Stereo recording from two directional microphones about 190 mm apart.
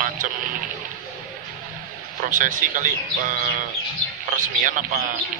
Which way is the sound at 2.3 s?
45° right (ahead or behind).